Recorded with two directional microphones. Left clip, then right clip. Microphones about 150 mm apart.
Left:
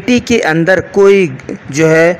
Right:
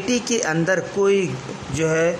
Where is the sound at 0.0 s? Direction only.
30° left (ahead or behind).